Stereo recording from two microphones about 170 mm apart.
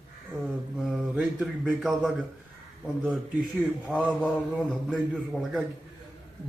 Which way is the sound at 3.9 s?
5° right (ahead or behind).